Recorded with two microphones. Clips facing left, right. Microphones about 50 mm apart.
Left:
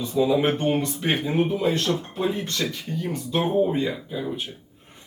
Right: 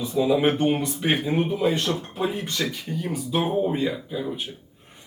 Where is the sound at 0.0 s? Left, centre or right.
Centre.